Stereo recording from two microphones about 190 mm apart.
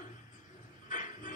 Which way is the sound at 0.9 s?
40° left (ahead or behind).